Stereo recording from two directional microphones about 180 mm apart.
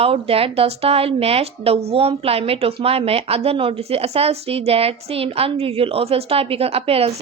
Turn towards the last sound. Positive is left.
turn(degrees=-35)  # may be behind; listen again after turning